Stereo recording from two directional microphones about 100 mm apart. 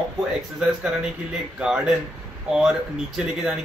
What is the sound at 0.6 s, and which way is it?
Speech, 10° right (ahead or behind).